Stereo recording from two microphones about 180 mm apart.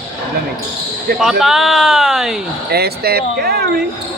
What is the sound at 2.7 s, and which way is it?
Speech, 60° right (ahead or behind).